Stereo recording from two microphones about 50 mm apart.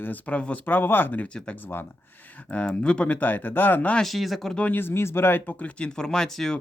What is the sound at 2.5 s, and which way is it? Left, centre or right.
Speech, left.